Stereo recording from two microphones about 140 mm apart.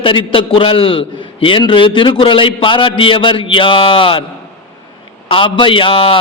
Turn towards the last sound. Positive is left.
turn(degrees=40)  # may be behind; listen again after turning